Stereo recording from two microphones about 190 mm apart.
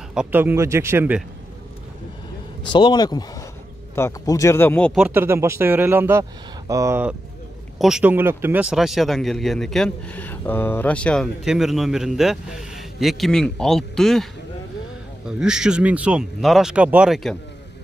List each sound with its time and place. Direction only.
0.1 s speech: 5° right (ahead or behind)
2.7 s speech: 25° left (ahead or behind)
4.9 s speech: 10° right (ahead or behind)
15.2 s speech: 5° right (ahead or behind)